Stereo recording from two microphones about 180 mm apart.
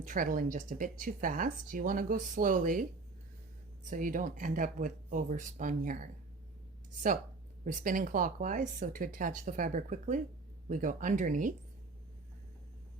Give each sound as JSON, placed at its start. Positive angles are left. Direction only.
{"t": 0.0, "sound": "speech", "side_deg": -50}
{"t": 3.8, "sound": "speech", "side_deg": -45}
{"t": 7.6, "sound": "speech", "side_deg": -45}